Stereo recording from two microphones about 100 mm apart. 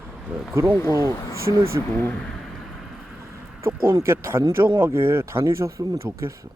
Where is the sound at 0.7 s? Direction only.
30° left (ahead or behind).